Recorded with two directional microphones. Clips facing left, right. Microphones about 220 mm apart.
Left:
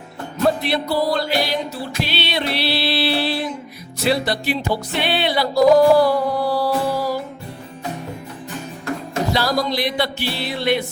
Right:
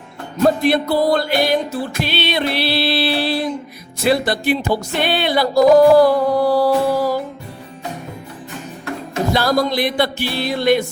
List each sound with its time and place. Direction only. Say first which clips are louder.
0.4 s music: right 4 dB; 50° right (ahead or behind)
9.3 s music: right 4 dB; 50° right (ahead or behind)